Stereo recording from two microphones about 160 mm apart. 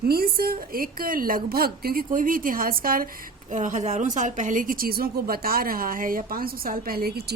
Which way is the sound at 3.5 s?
50° right (ahead or behind).